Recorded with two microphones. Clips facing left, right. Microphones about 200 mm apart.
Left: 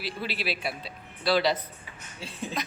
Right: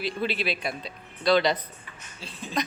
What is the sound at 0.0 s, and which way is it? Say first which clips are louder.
A woman's voice: right 5 dB; 5° left (ahead or behind).